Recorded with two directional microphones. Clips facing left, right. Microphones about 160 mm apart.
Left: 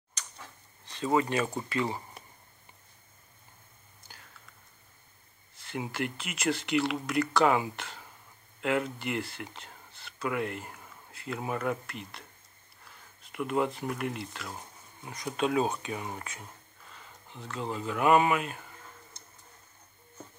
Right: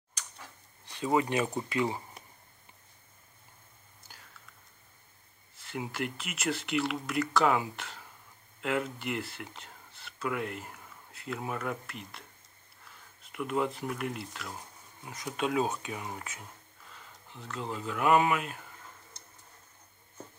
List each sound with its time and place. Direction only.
0.2 s a sound: 10° right (ahead or behind)
0.8 s speech: 15° right (ahead or behind)
5.7 s speech: centre (ahead or behind)
13.3 s speech: centre (ahead or behind)